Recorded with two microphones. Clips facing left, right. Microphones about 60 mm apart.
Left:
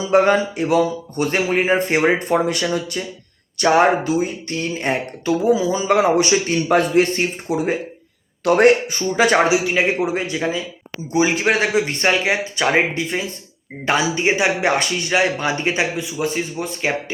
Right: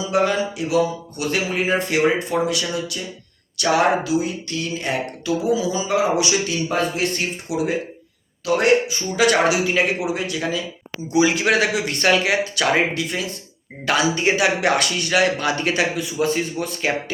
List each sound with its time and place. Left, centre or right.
0.1 s speech: left
5.9 s a man's voice: left
7.4 s a man's voice: left
9.1 s speech: left
16.1 s a man's voice: centre
16.6 s speech: left